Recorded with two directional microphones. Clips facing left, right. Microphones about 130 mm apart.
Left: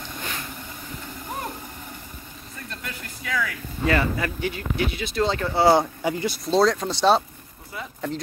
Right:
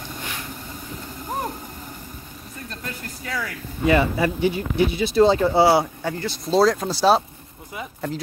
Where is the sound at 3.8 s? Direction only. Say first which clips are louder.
Right 4 dB; 15° right (ahead or behind).